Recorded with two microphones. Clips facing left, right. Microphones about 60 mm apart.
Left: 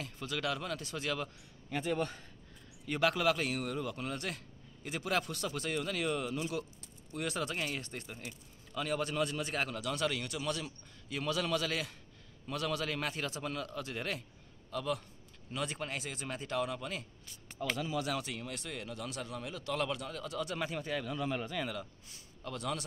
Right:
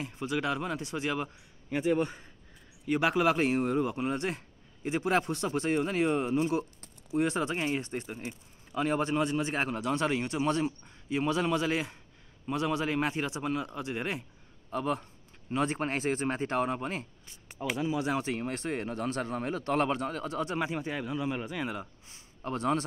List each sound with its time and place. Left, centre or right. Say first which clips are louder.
0.0 s speech: right 6 dB; right
17.6 s speech: right 5 dB; right